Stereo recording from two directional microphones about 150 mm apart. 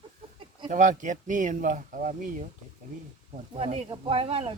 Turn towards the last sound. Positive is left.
turn(degrees=-40)  # may be behind; listen again after turning